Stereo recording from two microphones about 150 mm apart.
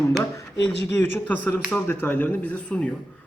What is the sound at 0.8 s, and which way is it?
Speech, 15° left (ahead or behind).